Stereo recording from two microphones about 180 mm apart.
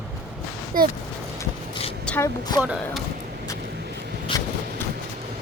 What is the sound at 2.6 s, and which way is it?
Speech, 5° right (ahead or behind).